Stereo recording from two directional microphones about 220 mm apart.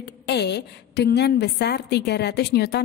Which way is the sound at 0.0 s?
50° left (ahead or behind).